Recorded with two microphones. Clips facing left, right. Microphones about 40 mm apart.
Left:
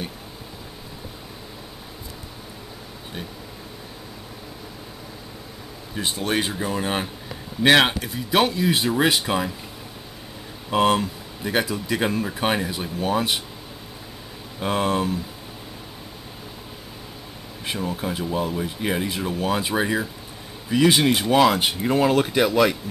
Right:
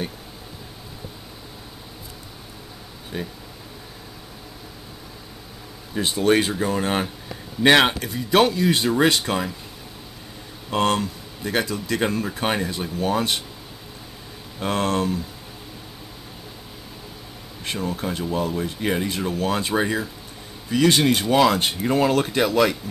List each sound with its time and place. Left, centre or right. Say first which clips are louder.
6.4 s speech: right 2 dB; centre
10.7 s speech: left 2 dB; centre
14.6 s speech: even; centre
17.6 s speech: even; centre